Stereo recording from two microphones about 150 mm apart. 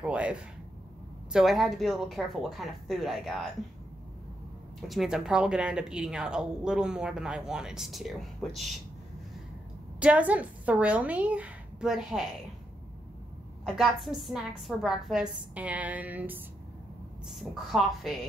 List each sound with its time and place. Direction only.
0.0 s a woman's voice: 5° right (ahead or behind)
4.8 s speech: 5° right (ahead or behind)
9.9 s a woman's voice: 10° right (ahead or behind)
13.7 s speech: centre (ahead or behind)
17.3 s speech: centre (ahead or behind)